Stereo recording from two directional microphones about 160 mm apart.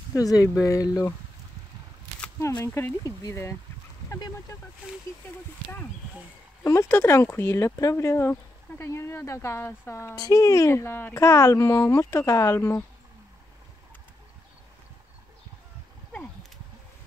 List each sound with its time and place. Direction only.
0.1 s speech: 20° left (ahead or behind)
2.4 s speech: 15° left (ahead or behind)
6.6 s speech: 15° left (ahead or behind)